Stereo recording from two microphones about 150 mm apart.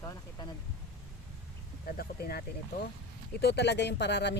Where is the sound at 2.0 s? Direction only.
90° left.